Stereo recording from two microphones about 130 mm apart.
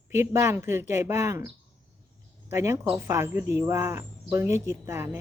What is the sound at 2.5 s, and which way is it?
A man's voice, 20° right (ahead or behind).